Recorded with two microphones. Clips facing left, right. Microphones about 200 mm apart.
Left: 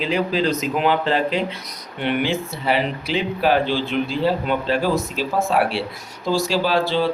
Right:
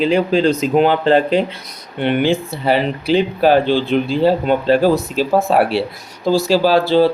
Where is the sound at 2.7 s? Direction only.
35° right (ahead or behind).